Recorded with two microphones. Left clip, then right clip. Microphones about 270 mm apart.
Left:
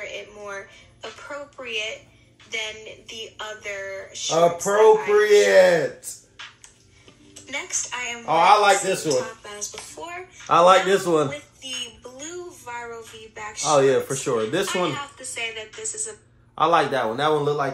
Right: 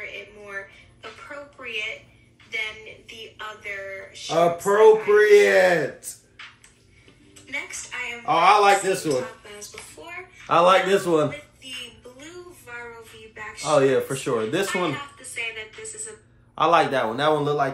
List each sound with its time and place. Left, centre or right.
0.0 s a sound: left
1.6 s a child's voice: left
4.3 s speech: centre
7.4 s speech: left
8.3 s speech: centre
9.4 s a sound: left
10.4 s a man's voice: centre
11.2 s a sound: left
13.6 s speech: centre
15.1 s speech: left
16.5 s speech: centre